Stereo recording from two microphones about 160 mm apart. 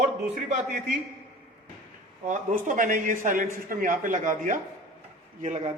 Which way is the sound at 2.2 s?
50° right (ahead or behind).